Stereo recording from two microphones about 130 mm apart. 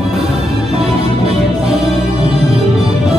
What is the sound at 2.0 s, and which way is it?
Music, 55° right (ahead or behind).